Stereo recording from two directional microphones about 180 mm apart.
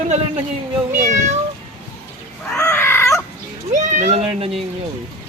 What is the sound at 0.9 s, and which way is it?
Speech, 45° right (ahead or behind).